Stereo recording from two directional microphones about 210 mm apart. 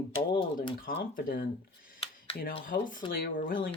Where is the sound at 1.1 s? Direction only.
45° left (ahead or behind).